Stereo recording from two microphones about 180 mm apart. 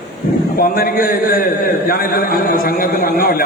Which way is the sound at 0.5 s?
55° left (ahead or behind).